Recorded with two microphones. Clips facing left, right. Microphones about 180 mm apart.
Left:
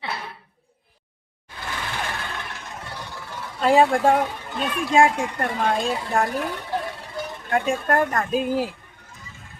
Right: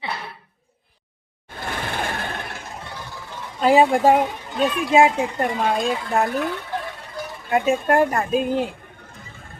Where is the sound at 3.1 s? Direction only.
15° right (ahead or behind).